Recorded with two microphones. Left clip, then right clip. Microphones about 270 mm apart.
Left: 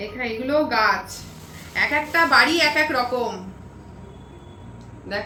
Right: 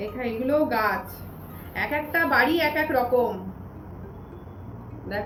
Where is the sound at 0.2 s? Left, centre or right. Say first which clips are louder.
Left 2 dB; centre.